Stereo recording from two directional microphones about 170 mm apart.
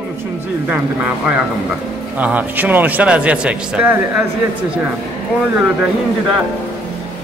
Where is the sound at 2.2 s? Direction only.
10° right (ahead or behind).